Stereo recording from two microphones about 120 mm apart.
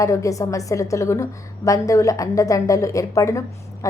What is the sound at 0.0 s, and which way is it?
A woman's voice, 25° left (ahead or behind).